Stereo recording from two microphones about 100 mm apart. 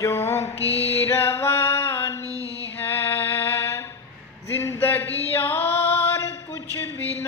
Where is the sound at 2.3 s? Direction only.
35° right (ahead or behind).